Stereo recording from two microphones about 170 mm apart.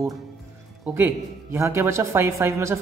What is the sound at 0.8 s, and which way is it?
A man's voice, 10° right (ahead or behind).